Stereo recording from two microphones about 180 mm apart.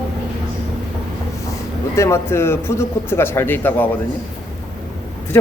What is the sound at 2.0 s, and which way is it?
A man's voice, 15° left (ahead or behind).